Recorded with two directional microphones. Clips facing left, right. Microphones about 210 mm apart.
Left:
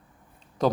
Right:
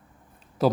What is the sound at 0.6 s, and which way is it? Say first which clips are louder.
Speech: right 2 dB; 5° right (ahead or behind).